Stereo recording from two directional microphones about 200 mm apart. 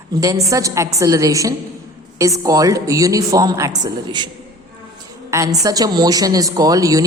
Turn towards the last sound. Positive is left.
turn(degrees=-15)  # may be behind; listen again after turning